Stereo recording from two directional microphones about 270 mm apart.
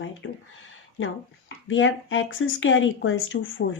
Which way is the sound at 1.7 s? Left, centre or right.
Left.